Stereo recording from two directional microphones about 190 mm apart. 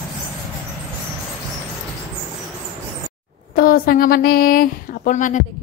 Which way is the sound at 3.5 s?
50° left (ahead or behind).